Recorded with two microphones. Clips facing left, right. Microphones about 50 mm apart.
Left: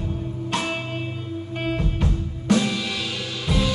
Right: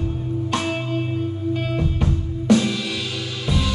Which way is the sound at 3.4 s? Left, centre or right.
Centre.